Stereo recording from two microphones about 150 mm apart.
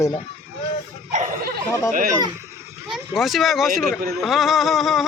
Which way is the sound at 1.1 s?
60° right (ahead or behind).